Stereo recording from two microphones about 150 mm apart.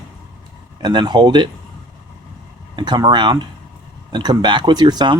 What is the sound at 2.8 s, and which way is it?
Speech, 30° right (ahead or behind).